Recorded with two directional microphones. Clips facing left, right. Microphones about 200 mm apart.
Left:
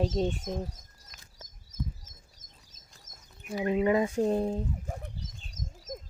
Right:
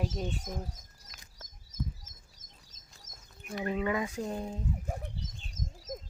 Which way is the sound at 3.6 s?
20° left (ahead or behind).